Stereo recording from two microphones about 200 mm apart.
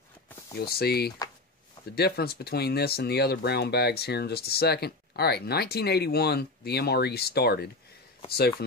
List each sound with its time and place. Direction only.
0.6 s speech: 50° left (ahead or behind)